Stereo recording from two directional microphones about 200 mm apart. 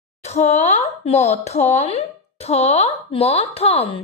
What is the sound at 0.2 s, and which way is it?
Speech, 35° left (ahead or behind).